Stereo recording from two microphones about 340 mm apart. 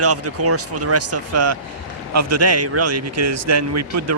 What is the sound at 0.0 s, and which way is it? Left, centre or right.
Speech, right.